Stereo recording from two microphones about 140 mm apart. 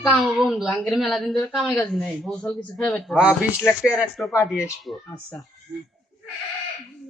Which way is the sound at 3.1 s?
10° right (ahead or behind).